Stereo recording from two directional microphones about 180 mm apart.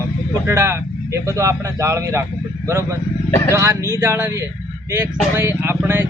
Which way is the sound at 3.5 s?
15° right (ahead or behind).